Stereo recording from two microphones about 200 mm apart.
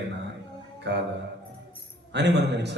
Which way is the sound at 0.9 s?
60° right (ahead or behind).